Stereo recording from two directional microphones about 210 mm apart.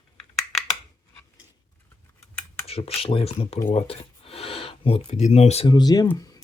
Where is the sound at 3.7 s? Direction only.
30° left (ahead or behind).